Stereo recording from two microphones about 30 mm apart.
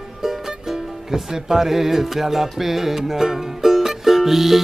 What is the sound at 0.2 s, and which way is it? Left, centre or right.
Music, centre.